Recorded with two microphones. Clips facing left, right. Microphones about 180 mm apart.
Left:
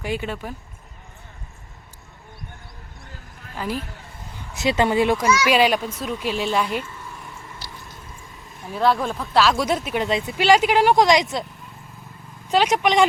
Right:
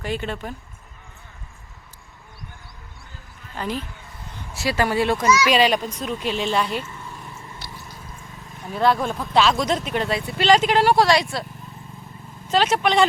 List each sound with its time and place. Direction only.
0.0 s speech: 10° left (ahead or behind)
3.5 s speech: 5° left (ahead or behind)
4.5 s speech: 20° left (ahead or behind)
8.7 s speech: centre (ahead or behind); by 11.4 s 20° left (ahead or behind)
12.5 s speech: 15° left (ahead or behind)